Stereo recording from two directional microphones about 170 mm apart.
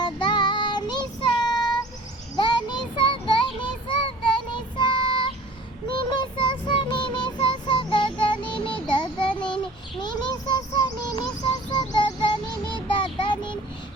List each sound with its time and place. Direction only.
0.0 s child singing: 25° left (ahead or behind)